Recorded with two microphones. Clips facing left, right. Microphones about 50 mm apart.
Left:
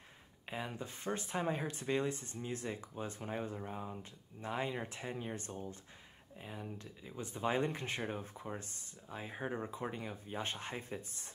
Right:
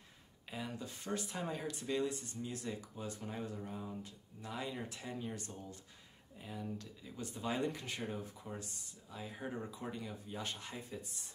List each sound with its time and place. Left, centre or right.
0.5 s speech: left